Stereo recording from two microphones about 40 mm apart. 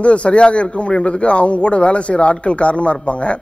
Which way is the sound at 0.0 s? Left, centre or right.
Left.